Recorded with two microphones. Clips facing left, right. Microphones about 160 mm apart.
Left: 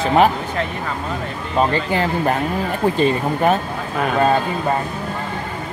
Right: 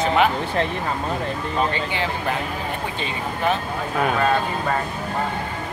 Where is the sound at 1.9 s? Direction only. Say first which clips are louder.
Left 6 dB; 40° left (ahead or behind).